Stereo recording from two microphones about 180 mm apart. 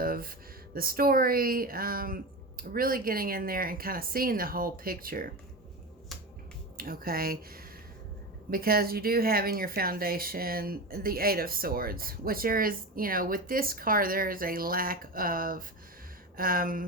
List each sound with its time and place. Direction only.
0.0 s speech: 55° right (ahead or behind)
6.7 s speech: 55° right (ahead or behind)